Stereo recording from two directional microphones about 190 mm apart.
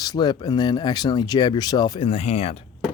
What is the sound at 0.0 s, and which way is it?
Speech, 20° left (ahead or behind).